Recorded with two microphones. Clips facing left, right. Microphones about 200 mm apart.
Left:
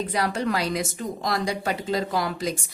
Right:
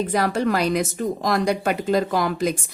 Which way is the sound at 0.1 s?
45° right (ahead or behind).